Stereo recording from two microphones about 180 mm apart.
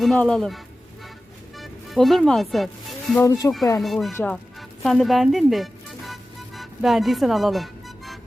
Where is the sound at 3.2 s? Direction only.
20° left (ahead or behind).